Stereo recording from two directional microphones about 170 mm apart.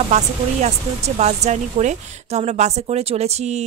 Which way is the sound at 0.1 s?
40° right (ahead or behind).